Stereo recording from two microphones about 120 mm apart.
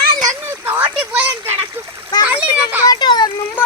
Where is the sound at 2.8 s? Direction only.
40° left (ahead or behind).